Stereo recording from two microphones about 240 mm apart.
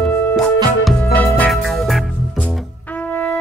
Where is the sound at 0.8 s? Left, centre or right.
Centre.